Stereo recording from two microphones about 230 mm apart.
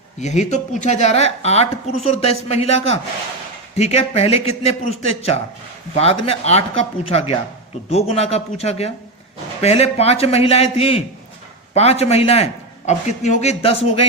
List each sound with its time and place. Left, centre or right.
0.2 s speech: left